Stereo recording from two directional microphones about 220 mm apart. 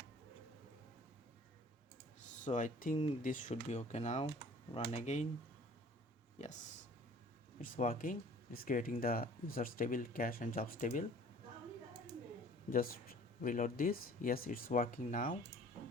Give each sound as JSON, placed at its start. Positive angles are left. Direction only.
{"t": 2.4, "sound": "speech", "side_deg": 35}
{"t": 7.6, "sound": "speech", "side_deg": 40}
{"t": 12.7, "sound": "speech", "side_deg": 40}